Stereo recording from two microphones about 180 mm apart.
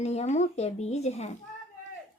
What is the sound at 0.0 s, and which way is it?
A woman's voice, 35° left (ahead or behind).